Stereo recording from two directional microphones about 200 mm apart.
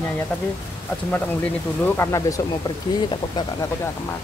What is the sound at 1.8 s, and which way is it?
Speech, 10° left (ahead or behind).